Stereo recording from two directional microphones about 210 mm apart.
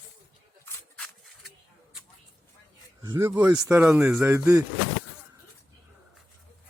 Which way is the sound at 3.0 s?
15° right (ahead or behind).